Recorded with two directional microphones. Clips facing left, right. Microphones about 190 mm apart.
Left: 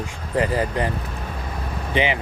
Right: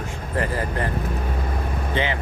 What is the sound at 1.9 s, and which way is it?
Speech, 15° left (ahead or behind).